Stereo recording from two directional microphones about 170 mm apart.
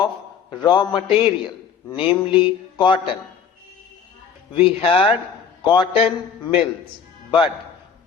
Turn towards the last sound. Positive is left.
turn(degrees=30)  # may be behind; listen again after turning